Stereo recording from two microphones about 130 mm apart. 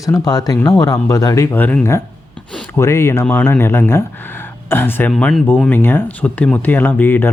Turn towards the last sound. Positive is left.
turn(degrees=15)  # may be behind; listen again after turning